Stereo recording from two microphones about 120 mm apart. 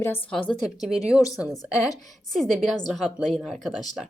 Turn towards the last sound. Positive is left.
turn(degrees=0)  # may be behind; listen again after turning